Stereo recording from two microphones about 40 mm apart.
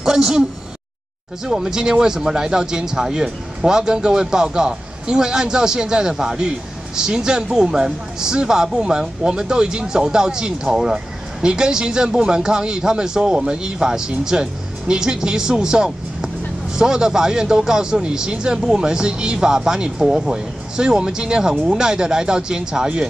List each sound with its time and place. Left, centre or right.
0.0 s a woman's voice: centre